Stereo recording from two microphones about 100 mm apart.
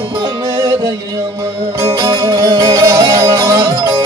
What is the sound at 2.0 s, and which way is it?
Music, 40° right (ahead or behind).